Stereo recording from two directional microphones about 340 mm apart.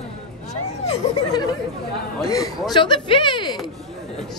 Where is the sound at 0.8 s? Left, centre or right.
Centre.